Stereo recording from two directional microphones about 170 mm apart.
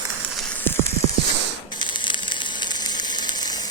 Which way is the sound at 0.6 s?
15° left (ahead or behind).